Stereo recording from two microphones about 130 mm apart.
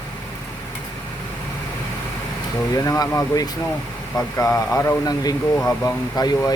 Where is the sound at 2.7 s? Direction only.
25° left (ahead or behind).